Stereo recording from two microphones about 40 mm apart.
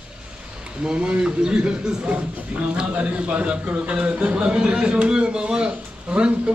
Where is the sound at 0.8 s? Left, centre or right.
Right.